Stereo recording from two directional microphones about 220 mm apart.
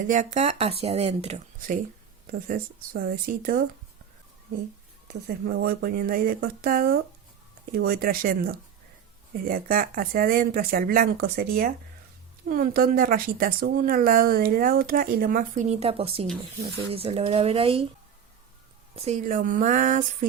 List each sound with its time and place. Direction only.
0.0 s speech: 35° right (ahead or behind)
5.0 s speech: 45° right (ahead or behind); by 17.8 s 25° right (ahead or behind)
18.9 s speech: 30° right (ahead or behind)